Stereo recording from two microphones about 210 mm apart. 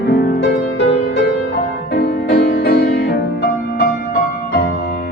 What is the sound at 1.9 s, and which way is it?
Music, 55° left (ahead or behind).